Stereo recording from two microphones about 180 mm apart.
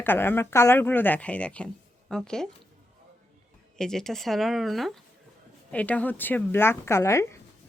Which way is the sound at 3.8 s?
5° left (ahead or behind).